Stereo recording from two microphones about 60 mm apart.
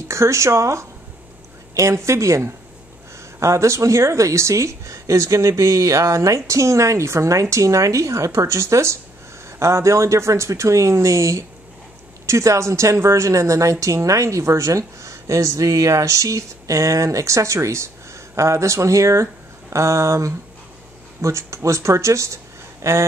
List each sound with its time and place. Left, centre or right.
0.1 s a woman's voice: right